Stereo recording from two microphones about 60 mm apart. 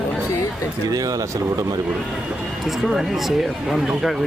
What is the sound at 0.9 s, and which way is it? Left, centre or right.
Speech, right.